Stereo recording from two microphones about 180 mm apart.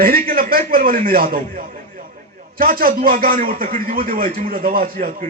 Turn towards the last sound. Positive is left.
turn(degrees=-50)  # may be behind; listen again after turning